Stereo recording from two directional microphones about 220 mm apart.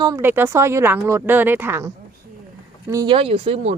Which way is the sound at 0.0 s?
15° right (ahead or behind).